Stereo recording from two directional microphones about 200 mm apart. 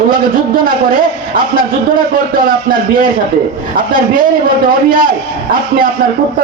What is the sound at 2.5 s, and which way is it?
Speech, 45° right (ahead or behind).